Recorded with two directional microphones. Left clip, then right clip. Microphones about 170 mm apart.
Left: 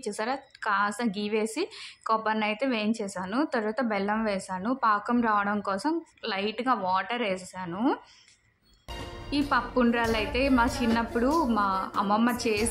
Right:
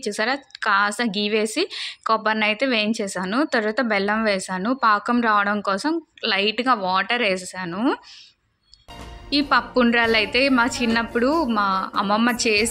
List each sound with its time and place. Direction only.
0.0 s a woman's voice: 15° right (ahead or behind)
9.3 s a woman's voice: 20° right (ahead or behind)